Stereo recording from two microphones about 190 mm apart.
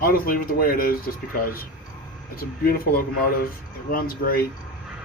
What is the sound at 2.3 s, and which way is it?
Speech, 50° left (ahead or behind).